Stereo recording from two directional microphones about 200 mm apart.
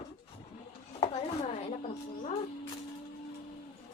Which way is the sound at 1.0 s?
30° left (ahead or behind).